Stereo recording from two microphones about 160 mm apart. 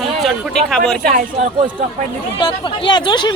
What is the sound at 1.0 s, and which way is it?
Speech, 55° right (ahead or behind).